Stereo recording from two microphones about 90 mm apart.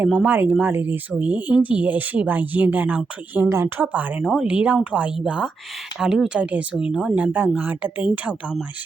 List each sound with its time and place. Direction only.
0.0 s speech: 15° right (ahead or behind)
4.2 s speech: 10° right (ahead or behind)